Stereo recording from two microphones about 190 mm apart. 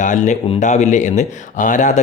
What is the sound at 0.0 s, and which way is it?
Speech, 40° left (ahead or behind).